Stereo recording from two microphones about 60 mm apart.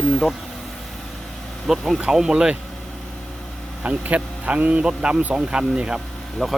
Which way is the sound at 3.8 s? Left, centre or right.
Right.